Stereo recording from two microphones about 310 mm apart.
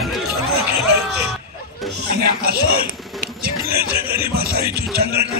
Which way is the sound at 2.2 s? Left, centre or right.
Right.